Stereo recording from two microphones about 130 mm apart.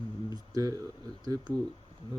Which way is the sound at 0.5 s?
25° right (ahead or behind).